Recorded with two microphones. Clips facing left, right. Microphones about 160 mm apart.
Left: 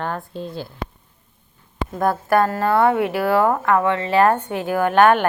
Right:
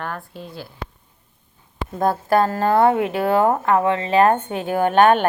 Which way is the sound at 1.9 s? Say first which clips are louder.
Even; 25° right (ahead or behind).